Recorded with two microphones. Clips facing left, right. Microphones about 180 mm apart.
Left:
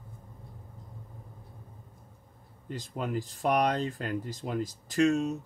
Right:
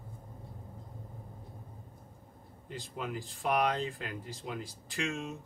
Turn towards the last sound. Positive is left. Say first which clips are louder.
# left 11 dB
turn(degrees=40)  # may be behind; listen again after turning